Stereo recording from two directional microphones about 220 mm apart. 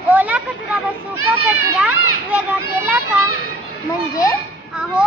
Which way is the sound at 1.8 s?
5° right (ahead or behind).